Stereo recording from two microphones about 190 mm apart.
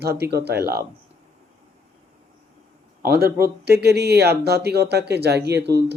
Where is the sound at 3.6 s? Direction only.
60° right (ahead or behind).